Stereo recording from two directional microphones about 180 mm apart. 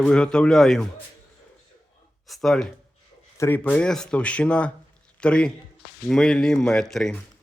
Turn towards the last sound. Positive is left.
turn(degrees=5)  # may be behind; listen again after turning